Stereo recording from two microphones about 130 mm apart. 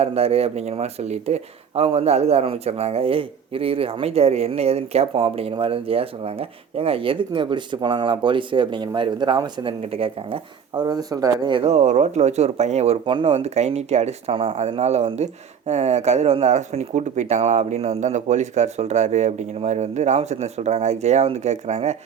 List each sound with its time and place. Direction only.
0.0 s speech: 50° right (ahead or behind)
10.8 s speech: 30° right (ahead or behind)
11.5 s speech: 55° right (ahead or behind)